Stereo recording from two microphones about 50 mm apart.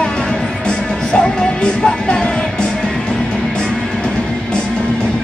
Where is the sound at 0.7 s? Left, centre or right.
Centre.